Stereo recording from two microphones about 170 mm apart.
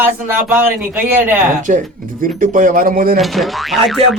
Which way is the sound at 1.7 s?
45° right (ahead or behind).